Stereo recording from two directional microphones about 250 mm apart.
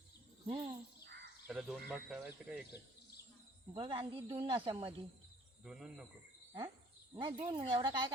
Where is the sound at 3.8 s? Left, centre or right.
Right.